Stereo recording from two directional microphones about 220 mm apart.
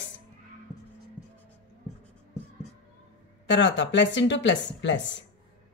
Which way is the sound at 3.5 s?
55° left (ahead or behind).